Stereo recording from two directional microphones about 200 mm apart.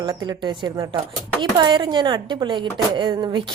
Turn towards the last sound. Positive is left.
turn(degrees=-20)  # may be behind; listen again after turning